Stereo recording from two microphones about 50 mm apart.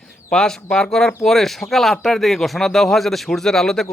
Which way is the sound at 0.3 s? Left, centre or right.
Centre.